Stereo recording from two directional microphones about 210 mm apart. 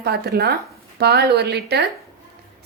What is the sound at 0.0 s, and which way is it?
A woman's voice, 50° right (ahead or behind).